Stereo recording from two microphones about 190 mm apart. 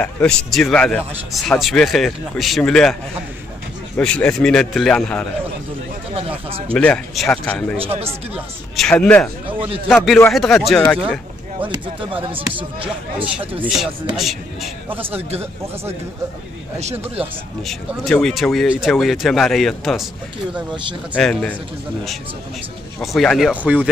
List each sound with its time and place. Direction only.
0.0 s speech: 5° left (ahead or behind)
6.7 s speech: 5° left (ahead or behind)
7.7 s speech: 30° right (ahead or behind)
8.7 s speech: 5° left (ahead or behind)
10.3 s speech: centre (ahead or behind)
11.7 s speech: 25° right (ahead or behind)
13.7 s speech: centre (ahead or behind)
16.8 s speech: 30° right (ahead or behind)
17.6 s speech: centre (ahead or behind)
21.1 s speech: centre (ahead or behind)
22.9 s speech: centre (ahead or behind)